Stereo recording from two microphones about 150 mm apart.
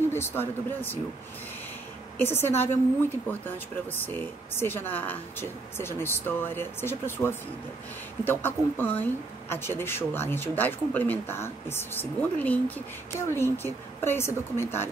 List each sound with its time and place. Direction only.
0.1 s speech: 15° left (ahead or behind)
2.1 s speech: 15° left (ahead or behind)
4.0 s speech: 15° left (ahead or behind)